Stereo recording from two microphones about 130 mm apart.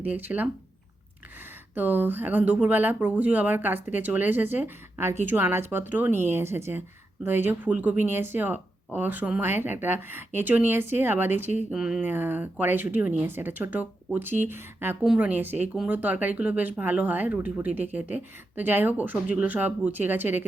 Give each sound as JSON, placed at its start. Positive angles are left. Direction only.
{"t": 0.0, "sound": "speech", "side_deg": -15}
{"t": 1.7, "sound": "speech", "side_deg": -15}
{"t": 11.7, "sound": "speech", "side_deg": -5}
{"t": 12.0, "sound": "speech", "side_deg": -15}
{"t": 15.0, "sound": "speech", "side_deg": -5}